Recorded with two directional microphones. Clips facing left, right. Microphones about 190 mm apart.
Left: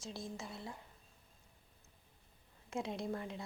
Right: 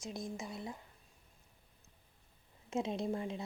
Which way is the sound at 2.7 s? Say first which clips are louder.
Right 4 dB; 20° right (ahead or behind).